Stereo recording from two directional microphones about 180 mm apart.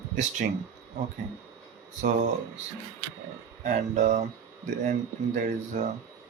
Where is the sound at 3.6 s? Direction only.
45° right (ahead or behind).